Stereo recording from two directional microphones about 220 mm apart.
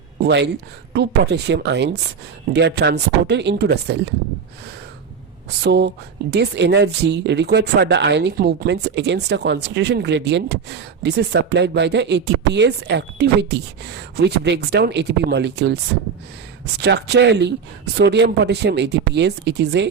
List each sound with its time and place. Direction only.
0.2 s speech: 50° right (ahead or behind)
5.6 s speech: 50° right (ahead or behind)